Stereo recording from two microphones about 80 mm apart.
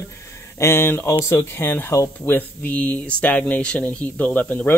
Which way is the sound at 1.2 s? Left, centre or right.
Left.